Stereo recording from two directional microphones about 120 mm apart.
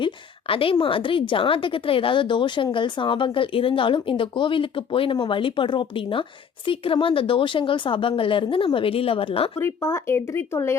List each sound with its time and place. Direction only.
0.0 s speech: 50° left (ahead or behind)
9.6 s speech: 20° left (ahead or behind)